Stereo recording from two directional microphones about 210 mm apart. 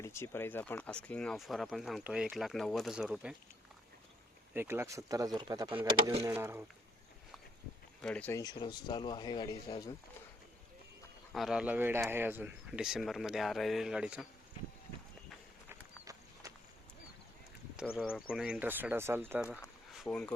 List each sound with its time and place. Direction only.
0.0 s speech: 10° left (ahead or behind); by 3.3 s 5° right (ahead or behind)
4.5 s speech: 10° right (ahead or behind); by 6.2 s 25° right (ahead or behind)
6.2 s speech: 10° right (ahead or behind)
8.0 s speech: 5° left (ahead or behind)
11.3 s speech: centre (ahead or behind)
16.4 s a sound: 15° right (ahead or behind)
17.9 s speech: 5° right (ahead or behind)